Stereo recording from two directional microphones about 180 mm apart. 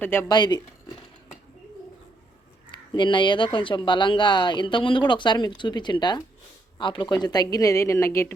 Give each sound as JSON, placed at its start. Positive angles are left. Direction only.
{"t": 0.0, "sound": "speech", "side_deg": 10}
{"t": 0.3, "sound": "speech", "side_deg": 25}
{"t": 2.6, "sound": "speech", "side_deg": 25}